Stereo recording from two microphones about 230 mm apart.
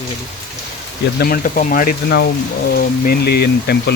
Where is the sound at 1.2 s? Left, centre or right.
Left.